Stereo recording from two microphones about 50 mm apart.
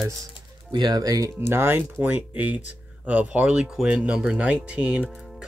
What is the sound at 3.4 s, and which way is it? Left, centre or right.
Speech, centre.